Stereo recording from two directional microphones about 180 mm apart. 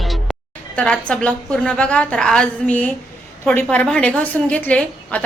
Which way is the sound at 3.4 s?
10° left (ahead or behind).